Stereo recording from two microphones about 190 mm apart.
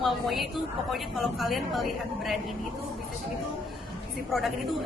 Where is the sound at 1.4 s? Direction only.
Centre (ahead or behind).